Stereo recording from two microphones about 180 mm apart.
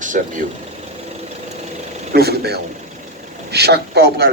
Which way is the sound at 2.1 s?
60° right (ahead or behind).